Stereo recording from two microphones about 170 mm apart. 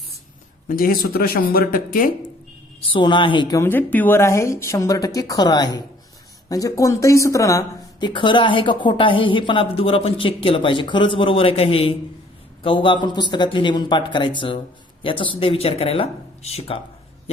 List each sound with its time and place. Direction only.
0.7 s speech: 55° left (ahead or behind)
2.9 s speech: 30° left (ahead or behind)
3.6 s speech: 10° left (ahead or behind); by 16.8 s 35° left (ahead or behind)